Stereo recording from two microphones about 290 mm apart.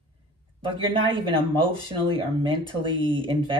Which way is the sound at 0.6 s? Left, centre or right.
Centre.